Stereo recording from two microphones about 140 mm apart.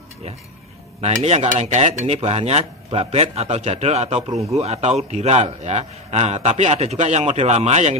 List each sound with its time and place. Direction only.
1.0 s a man's voice: 50° right (ahead or behind)